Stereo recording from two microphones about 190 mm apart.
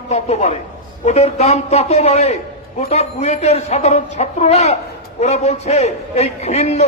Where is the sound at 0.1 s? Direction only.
35° left (ahead or behind).